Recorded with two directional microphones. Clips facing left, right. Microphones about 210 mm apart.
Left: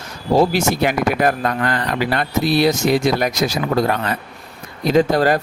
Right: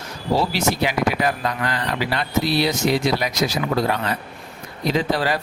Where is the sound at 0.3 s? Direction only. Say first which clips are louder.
Left 6 dB; 50° left (ahead or behind).